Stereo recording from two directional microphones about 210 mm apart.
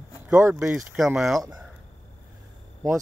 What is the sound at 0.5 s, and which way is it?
Speech, 5° right (ahead or behind).